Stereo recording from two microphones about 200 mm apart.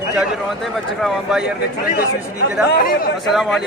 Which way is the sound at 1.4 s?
50° left (ahead or behind).